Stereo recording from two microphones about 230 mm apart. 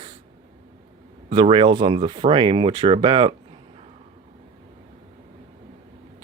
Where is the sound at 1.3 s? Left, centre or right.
Right.